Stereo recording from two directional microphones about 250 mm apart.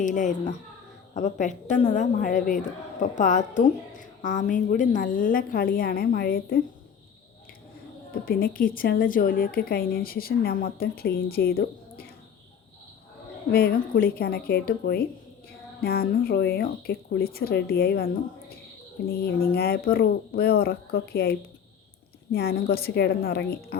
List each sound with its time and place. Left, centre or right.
0.0 s a woman's voice: left
8.2 s a woman's voice: left
13.5 s a woman's voice: left